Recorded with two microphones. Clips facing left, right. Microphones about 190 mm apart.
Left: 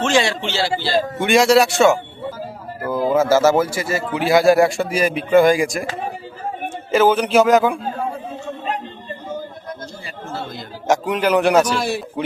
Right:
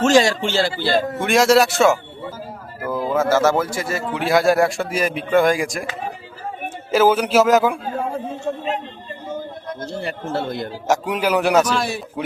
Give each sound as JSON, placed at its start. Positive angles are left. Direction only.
{"t": 0.0, "sound": "speech", "side_deg": -40}
{"t": 1.2, "sound": "a man's voice", "side_deg": 0}
{"t": 6.9, "sound": "a man's voice", "side_deg": -5}
{"t": 9.9, "sound": "speech", "side_deg": -65}
{"t": 10.8, "sound": "a man's voice", "side_deg": -5}